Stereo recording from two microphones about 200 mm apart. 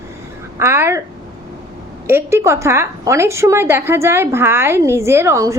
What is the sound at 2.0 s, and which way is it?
A woman's voice, 10° right (ahead or behind).